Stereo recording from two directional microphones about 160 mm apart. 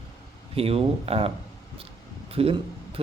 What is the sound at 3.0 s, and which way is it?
Speech, 35° right (ahead or behind).